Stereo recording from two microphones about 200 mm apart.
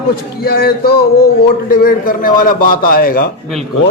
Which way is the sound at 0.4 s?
50° left (ahead or behind).